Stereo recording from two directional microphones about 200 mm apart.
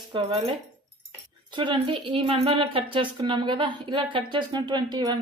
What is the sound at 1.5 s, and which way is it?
Speech, 25° right (ahead or behind).